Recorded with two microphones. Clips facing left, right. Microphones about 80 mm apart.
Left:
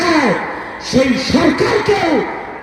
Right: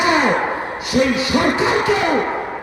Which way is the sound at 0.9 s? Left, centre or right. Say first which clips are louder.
Left 4 dB; right.